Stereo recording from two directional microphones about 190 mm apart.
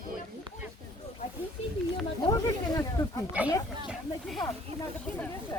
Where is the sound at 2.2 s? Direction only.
20° left (ahead or behind).